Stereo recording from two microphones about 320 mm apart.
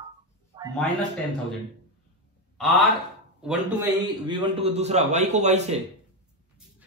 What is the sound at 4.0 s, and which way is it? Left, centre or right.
A man's voice, centre.